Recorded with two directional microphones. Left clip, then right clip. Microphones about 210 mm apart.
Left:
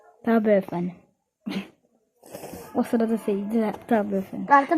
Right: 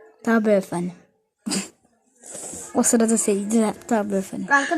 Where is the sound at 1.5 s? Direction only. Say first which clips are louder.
Right 6 dB; 20° right (ahead or behind).